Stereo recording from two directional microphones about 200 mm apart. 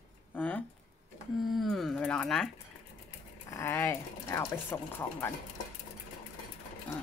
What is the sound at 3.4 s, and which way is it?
Speech, 15° left (ahead or behind).